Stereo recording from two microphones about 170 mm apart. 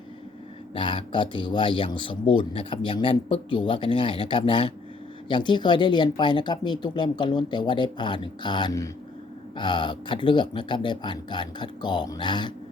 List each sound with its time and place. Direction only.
0.7 s speech: 30° left (ahead or behind)